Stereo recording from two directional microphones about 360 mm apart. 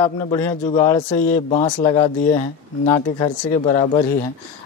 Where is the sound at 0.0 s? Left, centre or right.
Centre.